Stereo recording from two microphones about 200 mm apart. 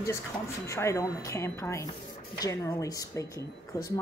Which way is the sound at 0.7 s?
15° left (ahead or behind).